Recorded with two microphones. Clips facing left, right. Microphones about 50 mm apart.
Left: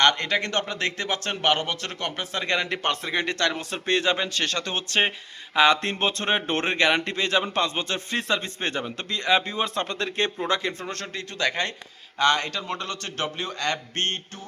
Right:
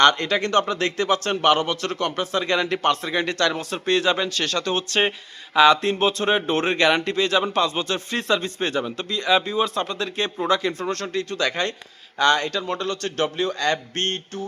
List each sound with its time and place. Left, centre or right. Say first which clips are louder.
0.0 s speech: right 4 dB; left
5.8 s speech: right 5 dB; left
6.7 s speech: right 2 dB; left
9.1 s speech: right 3 dB; left
10.2 s speech: right 2 dB; centre
10.5 s speech: right 5 dB; left